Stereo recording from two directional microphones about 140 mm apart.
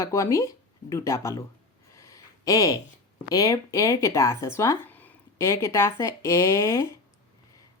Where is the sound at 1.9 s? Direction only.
20° left (ahead or behind).